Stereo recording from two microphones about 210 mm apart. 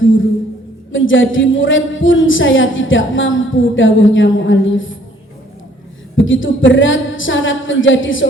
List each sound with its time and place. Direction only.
0.0 s a woman's voice: 65° left (ahead or behind)
6.1 s a woman's voice: 65° left (ahead or behind)